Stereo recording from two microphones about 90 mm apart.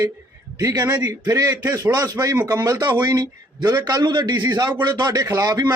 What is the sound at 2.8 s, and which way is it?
Speech, 50° right (ahead or behind).